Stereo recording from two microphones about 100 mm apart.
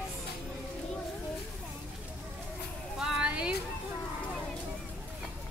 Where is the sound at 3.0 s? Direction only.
10° right (ahead or behind).